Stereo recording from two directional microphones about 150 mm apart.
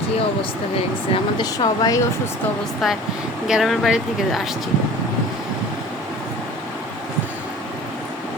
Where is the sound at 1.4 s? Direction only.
25° left (ahead or behind).